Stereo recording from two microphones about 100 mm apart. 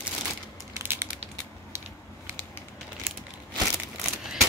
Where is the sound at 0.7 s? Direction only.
25° right (ahead or behind).